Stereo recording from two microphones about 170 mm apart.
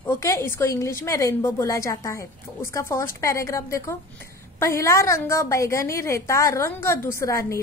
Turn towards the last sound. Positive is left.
turn(degrees=15)  # may be behind; listen again after turning